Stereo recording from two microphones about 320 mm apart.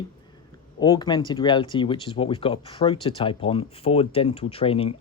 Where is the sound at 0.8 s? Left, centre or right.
Centre.